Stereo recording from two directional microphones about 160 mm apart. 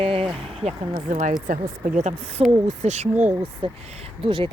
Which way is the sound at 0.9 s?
50° right (ahead or behind).